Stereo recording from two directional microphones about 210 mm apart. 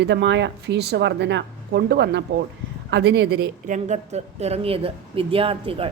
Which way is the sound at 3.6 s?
35° right (ahead or behind).